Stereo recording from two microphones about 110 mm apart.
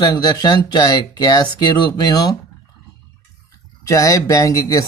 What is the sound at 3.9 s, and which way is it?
Speech, 30° left (ahead or behind).